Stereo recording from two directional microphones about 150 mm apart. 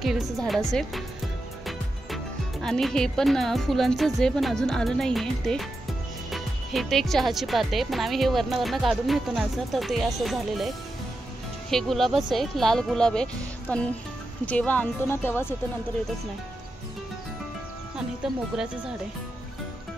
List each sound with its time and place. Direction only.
0.0 s speech: centre (ahead or behind)
2.6 s speech: 5° left (ahead or behind)
11.7 s speech: centre (ahead or behind)
18.2 s speech: 5° right (ahead or behind)